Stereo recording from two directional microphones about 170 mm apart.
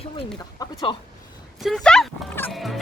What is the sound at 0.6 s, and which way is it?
Speech, 25° left (ahead or behind).